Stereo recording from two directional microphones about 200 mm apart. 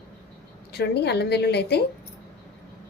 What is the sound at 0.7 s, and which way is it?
A woman's voice, 55° left (ahead or behind).